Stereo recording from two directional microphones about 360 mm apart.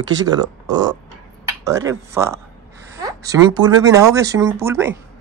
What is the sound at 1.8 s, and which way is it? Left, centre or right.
Speech, centre.